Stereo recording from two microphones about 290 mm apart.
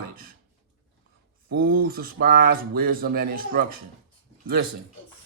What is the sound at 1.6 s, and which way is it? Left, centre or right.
Speech, right.